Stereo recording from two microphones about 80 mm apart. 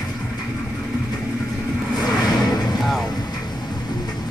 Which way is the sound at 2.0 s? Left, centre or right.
Left.